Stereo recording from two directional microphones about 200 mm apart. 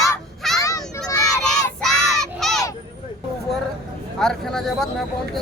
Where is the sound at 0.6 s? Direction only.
15° left (ahead or behind).